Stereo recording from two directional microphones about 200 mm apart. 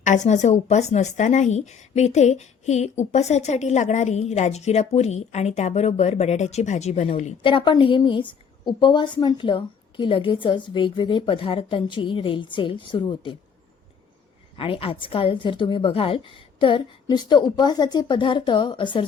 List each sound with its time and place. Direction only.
0.0 s a woman's voice: 40° left (ahead or behind)
14.6 s a woman's voice: 25° left (ahead or behind)